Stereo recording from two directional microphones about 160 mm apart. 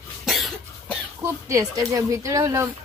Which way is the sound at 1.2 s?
20° right (ahead or behind).